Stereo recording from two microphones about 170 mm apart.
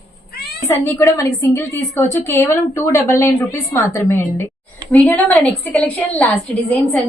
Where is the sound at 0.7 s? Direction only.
15° left (ahead or behind).